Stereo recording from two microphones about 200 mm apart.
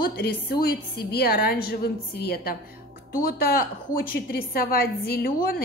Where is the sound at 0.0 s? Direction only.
50° left (ahead or behind).